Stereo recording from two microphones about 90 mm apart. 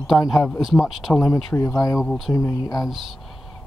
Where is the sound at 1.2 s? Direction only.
35° left (ahead or behind).